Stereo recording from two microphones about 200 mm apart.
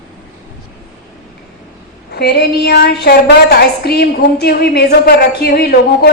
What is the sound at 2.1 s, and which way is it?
A man's voice, 55° left (ahead or behind).